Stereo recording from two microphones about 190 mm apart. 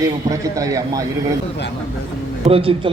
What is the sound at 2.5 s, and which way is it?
Speech, 30° right (ahead or behind).